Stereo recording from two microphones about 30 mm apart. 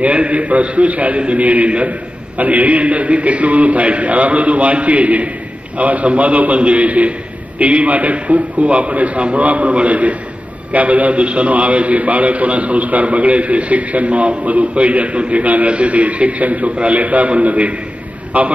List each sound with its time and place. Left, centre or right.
0.0 s a man's voice: right
15.4 s a man's voice: right
15.7 s a man's voice: right
18.3 s a man's voice: right